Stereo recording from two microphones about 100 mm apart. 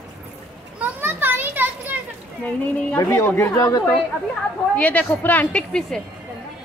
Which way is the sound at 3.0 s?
30° left (ahead or behind).